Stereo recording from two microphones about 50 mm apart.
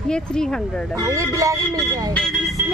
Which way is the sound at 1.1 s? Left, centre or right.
Right.